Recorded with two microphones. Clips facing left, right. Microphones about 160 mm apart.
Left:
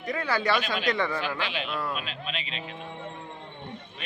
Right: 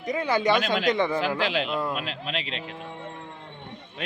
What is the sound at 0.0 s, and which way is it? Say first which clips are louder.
Speech: right 4 dB; 20° right (ahead or behind).